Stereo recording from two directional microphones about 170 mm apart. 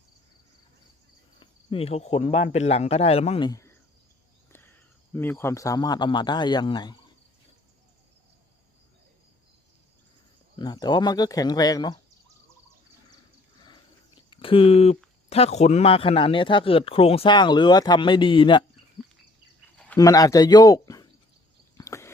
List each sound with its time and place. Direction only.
1.4 s cricket: 35° left (ahead or behind)
2.5 s speech: 40° left (ahead or behind)
4.5 s speech: 15° left (ahead or behind)
10.6 s speech: 25° left (ahead or behind)
14.2 s speech: 30° left (ahead or behind)
19.7 s cricket: 5° left (ahead or behind)
20.0 s speech: 20° left (ahead or behind)
21.8 s a sound: 15° left (ahead or behind)